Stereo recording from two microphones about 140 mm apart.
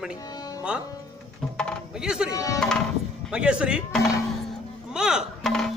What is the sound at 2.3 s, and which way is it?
Music, 25° left (ahead or behind).